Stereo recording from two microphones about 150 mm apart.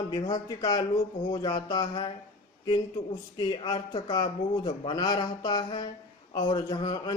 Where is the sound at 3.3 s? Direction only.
30° left (ahead or behind).